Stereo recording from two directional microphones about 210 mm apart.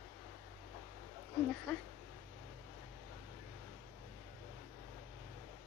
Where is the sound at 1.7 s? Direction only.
5° left (ahead or behind).